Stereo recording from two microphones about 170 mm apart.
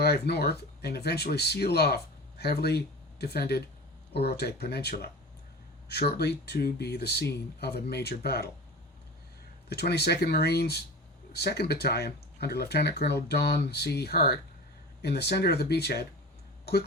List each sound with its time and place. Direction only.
0.0 s speech: 70° left (ahead or behind)
9.6 s speech: 70° left (ahead or behind)